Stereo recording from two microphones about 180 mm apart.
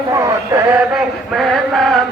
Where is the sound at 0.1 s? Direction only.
15° right (ahead or behind); by 2.0 s centre (ahead or behind).